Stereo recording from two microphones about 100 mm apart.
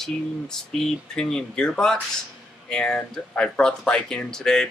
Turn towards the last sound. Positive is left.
turn(degrees=5)  # may be behind; listen again after turning